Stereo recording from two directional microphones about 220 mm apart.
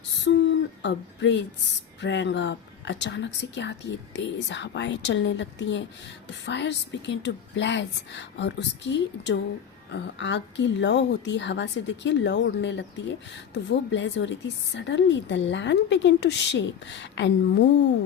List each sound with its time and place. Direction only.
0.3 s a woman's voice: 50° left (ahead or behind)